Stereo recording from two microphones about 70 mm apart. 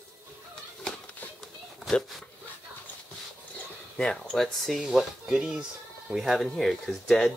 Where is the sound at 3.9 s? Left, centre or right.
Centre.